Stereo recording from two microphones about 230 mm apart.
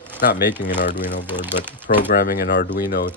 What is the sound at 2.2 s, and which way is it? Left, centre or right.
Speech, left.